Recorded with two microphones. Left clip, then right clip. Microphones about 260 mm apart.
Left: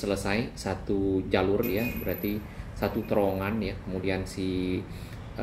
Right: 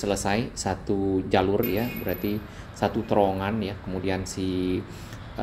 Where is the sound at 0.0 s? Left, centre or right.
Right.